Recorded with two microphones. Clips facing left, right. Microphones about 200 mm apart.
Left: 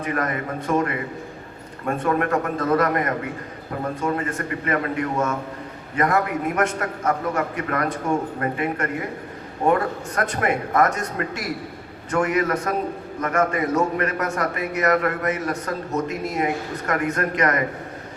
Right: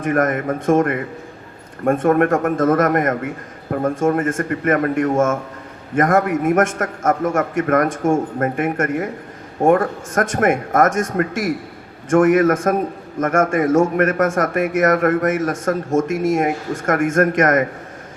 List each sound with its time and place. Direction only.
0.0 s a man's voice: 50° right (ahead or behind)